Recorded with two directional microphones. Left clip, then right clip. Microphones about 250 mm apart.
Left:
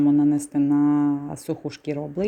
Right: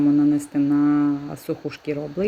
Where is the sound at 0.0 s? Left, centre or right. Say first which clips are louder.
Right 1 dB; centre.